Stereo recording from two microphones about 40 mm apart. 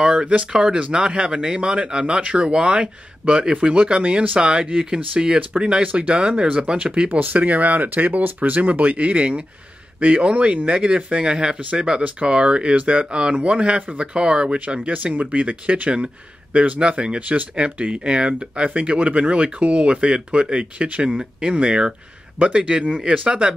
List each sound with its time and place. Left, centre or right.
0.1 s speech: right
4.4 s speech: right
5.8 s speech: right
7.1 s speech: right; by 12.0 s centre
12.0 s speech: right
23.0 s speech: right